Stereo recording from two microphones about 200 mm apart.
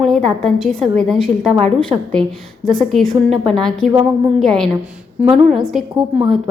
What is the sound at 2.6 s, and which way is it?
A woman's voice, centre (ahead or behind).